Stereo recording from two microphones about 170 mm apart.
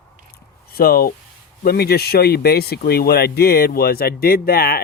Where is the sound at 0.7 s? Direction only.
60° left (ahead or behind).